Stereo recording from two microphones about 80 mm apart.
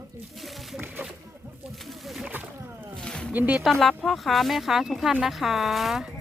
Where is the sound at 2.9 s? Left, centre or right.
Centre.